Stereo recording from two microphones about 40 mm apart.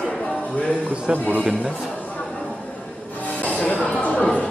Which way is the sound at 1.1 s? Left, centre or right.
Right.